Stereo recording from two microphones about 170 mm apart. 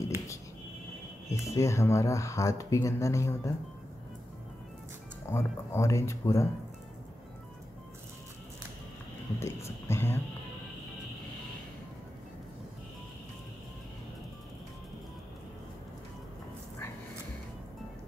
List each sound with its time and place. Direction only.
1.3 s speech: 15° left (ahead or behind)
5.3 s speech: 15° left (ahead or behind)
9.4 s speech: 15° left (ahead or behind)